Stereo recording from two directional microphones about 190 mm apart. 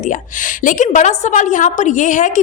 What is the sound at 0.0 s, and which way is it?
A woman's voice, 45° left (ahead or behind).